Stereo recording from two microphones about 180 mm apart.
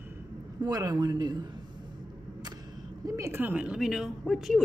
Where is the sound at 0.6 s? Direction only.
20° right (ahead or behind).